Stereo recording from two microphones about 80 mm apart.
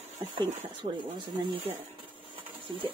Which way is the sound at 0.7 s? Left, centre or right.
Right.